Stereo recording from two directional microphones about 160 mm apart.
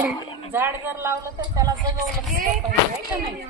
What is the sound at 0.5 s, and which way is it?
Speech, 15° right (ahead or behind).